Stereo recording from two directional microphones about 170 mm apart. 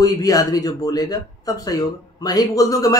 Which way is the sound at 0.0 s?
20° left (ahead or behind).